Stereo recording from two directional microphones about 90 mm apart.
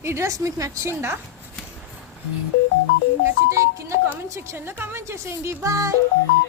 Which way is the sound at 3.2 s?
35° right (ahead or behind).